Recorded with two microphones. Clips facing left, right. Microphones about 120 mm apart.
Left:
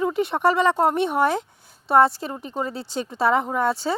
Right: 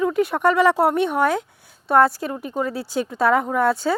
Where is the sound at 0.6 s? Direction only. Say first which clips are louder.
Right 2 dB; 5° right (ahead or behind).